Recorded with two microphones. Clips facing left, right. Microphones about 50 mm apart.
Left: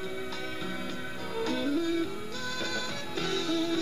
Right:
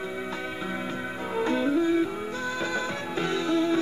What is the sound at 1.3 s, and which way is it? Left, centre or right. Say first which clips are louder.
Music: right 5 dB; right.